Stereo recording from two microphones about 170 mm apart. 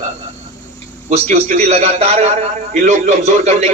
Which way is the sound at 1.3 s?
40° right (ahead or behind).